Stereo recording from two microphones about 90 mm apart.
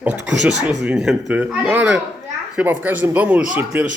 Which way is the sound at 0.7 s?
5° right (ahead or behind).